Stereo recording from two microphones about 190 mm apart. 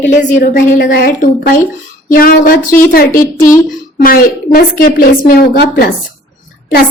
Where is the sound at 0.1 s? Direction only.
45° left (ahead or behind).